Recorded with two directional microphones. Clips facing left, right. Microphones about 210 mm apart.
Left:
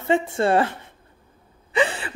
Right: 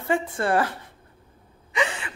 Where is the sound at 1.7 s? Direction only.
35° left (ahead or behind).